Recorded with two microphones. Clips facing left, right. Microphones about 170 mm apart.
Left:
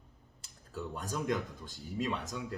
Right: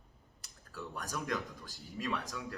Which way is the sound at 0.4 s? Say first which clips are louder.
Left 4 dB; 25° left (ahead or behind).